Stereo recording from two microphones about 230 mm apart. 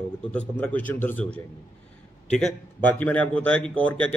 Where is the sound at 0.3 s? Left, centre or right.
Centre.